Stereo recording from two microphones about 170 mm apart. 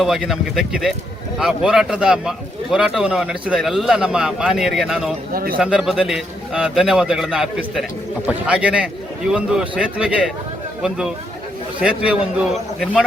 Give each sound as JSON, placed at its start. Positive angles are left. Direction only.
{"t": 0.0, "sound": "speech", "side_deg": 0}
{"t": 5.3, "sound": "speech", "side_deg": -60}
{"t": 5.5, "sound": "a man's voice", "side_deg": -5}